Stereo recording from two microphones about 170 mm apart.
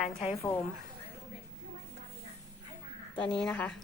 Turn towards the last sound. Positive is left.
turn(degrees=5)  # may be behind; listen again after turning